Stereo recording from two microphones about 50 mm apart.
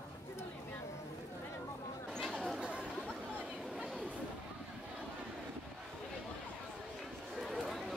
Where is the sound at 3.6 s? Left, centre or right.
Centre.